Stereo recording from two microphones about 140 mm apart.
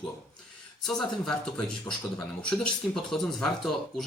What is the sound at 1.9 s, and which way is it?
Speech, 15° left (ahead or behind).